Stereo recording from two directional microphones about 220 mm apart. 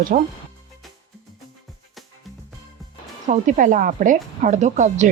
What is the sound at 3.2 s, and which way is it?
Speech, 35° right (ahead or behind).